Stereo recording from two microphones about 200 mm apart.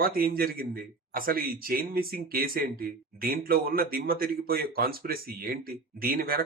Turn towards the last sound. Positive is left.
turn(degrees=-45)  # may be behind; listen again after turning